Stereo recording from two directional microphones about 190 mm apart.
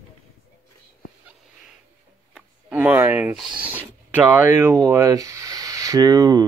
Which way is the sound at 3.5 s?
10° right (ahead or behind).